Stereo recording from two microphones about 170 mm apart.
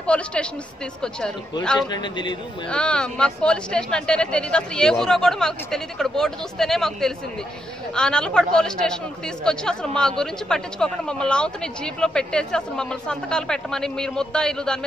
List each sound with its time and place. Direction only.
0.0 s a woman's voice: 5° left (ahead or behind)
1.9 s a man's voice: 25° left (ahead or behind)
2.7 s speech: 5° left (ahead or behind)